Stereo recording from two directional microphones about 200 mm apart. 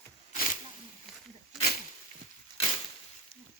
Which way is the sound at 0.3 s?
40° left (ahead or behind).